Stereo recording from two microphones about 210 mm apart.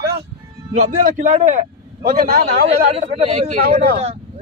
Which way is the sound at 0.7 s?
35° right (ahead or behind).